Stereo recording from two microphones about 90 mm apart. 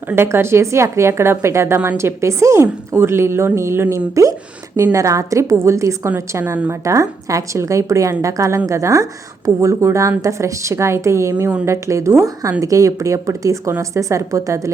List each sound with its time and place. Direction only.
0.2 s a woman's voice: 25° right (ahead or behind)